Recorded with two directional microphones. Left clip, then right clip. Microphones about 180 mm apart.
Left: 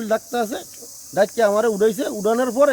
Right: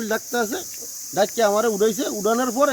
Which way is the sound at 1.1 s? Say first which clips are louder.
Left 2 dB; 40° left (ahead or behind).